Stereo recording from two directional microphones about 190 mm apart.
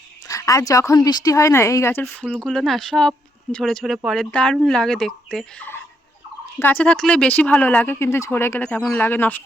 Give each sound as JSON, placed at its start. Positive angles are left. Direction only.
{"t": 0.3, "sound": "speech", "side_deg": 15}
{"t": 2.2, "sound": "speech", "side_deg": 0}